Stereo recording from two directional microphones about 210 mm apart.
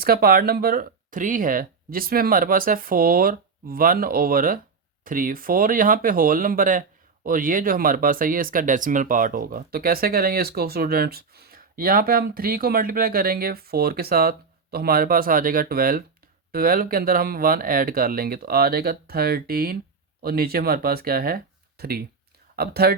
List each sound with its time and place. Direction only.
0.0 s speech: 45° right (ahead or behind)